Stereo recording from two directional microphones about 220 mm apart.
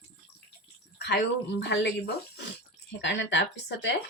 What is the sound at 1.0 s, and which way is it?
Speech, 50° left (ahead or behind).